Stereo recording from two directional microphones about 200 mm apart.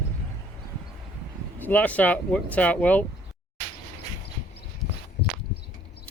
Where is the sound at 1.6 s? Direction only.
10° left (ahead or behind).